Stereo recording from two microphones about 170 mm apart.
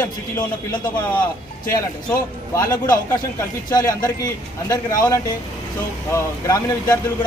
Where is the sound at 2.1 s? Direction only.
20° left (ahead or behind).